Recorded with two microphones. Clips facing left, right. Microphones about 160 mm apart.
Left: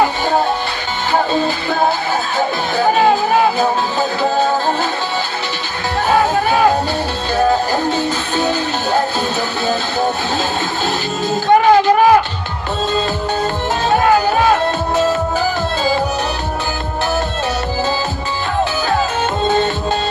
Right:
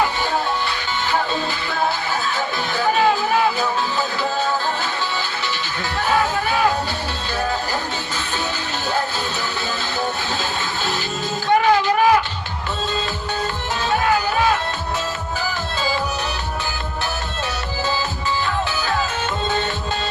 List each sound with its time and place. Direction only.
3.1 s music: 40° left (ahead or behind)
6.1 s music: 40° left (ahead or behind)
11.4 s a sound: 40° left (ahead or behind)
13.9 s music: 45° left (ahead or behind)